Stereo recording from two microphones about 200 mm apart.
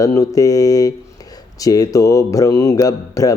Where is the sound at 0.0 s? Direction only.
15° left (ahead or behind).